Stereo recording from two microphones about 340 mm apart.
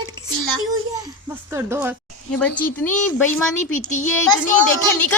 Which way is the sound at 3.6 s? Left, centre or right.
Left.